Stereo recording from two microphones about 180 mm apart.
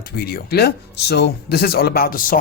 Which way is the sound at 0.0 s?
60° left (ahead or behind).